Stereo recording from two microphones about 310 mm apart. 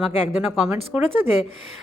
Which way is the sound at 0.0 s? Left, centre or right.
Centre.